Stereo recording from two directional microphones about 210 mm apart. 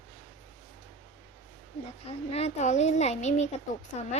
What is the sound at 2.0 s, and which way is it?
A woman's voice, 30° left (ahead or behind).